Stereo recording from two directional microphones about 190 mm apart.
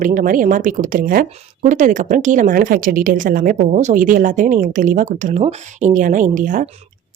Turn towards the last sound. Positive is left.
turn(degrees=-45)  # may be behind; listen again after turning